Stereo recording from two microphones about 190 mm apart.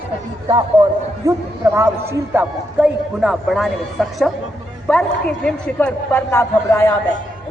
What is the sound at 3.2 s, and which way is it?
A man's voice, centre (ahead or behind).